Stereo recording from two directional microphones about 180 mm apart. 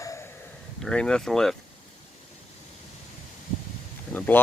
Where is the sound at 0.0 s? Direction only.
15° left (ahead or behind).